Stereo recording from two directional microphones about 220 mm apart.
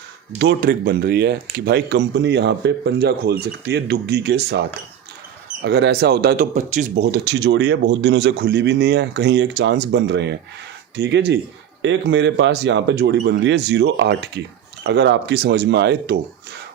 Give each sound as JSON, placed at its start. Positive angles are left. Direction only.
{"t": 0.3, "sound": "speech", "side_deg": -45}
{"t": 5.6, "sound": "speech", "side_deg": -50}
{"t": 6.9, "sound": "speech", "side_deg": -50}